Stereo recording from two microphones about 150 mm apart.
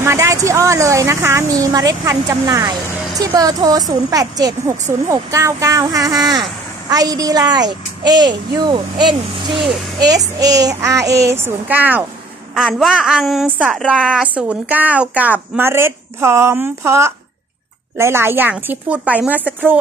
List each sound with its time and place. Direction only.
0.0 s a woman's voice: 20° right (ahead or behind)